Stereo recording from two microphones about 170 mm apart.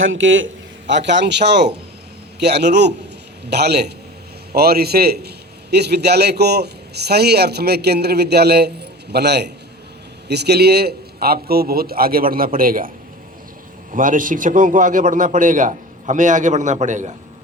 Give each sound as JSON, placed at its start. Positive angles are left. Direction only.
{"t": 0.4, "sound": "a man's voice", "side_deg": -90}
{"t": 13.9, "sound": "a man's voice", "side_deg": -50}